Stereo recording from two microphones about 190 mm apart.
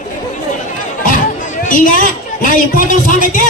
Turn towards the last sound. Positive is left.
turn(degrees=45)  # may be behind; listen again after turning